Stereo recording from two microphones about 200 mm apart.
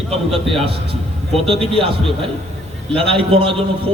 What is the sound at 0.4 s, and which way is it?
Speech, 30° right (ahead or behind).